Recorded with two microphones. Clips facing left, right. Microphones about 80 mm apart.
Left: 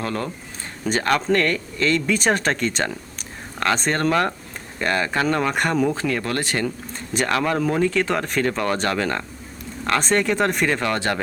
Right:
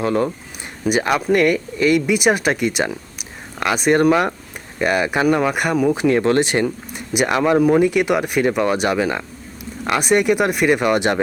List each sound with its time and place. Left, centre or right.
0.0 s speech: centre